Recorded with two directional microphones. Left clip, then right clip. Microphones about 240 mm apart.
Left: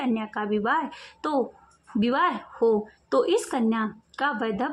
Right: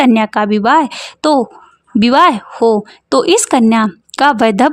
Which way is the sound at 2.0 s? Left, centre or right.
Right.